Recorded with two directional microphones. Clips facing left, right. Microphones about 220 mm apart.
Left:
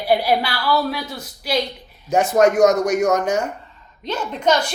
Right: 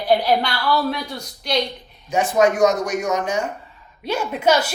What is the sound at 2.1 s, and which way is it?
Speech, 40° left (ahead or behind).